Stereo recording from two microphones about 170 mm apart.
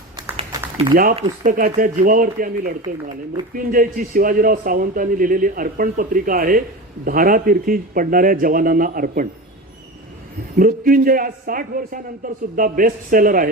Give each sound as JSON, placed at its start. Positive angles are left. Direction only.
{"t": 0.2, "sound": "a sound", "side_deg": -30}
{"t": 1.5, "sound": "speech", "side_deg": -55}
{"t": 3.5, "sound": "a man's voice", "side_deg": -55}
{"t": 10.6, "sound": "a man's voice", "side_deg": -55}